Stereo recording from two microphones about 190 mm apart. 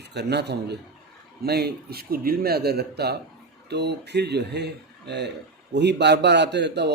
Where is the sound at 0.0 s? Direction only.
60° right (ahead or behind).